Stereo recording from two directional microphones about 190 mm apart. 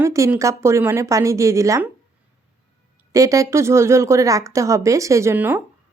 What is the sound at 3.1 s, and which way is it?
A woman's voice, 15° right (ahead or behind).